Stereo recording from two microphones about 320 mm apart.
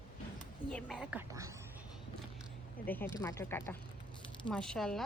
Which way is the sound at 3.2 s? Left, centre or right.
Centre.